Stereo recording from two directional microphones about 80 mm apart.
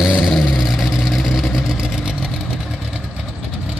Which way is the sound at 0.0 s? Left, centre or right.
Centre.